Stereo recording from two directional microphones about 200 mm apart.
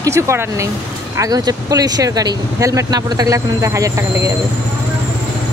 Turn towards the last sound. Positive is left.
turn(degrees=-15)  # may be behind; listen again after turning